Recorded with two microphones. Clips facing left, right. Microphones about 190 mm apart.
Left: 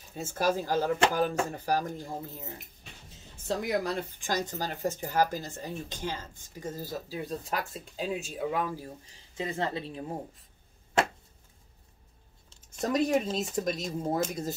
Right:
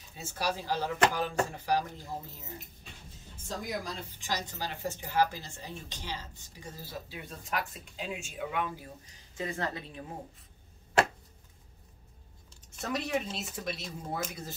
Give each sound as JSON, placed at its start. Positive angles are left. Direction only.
{"t": 0.1, "sound": "speech", "side_deg": 50}
{"t": 3.4, "sound": "a woman's voice", "side_deg": 65}
{"t": 12.8, "sound": "a woman's voice", "side_deg": 40}